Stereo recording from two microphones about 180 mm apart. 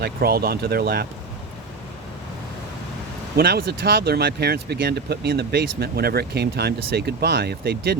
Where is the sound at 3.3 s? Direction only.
60° right (ahead or behind).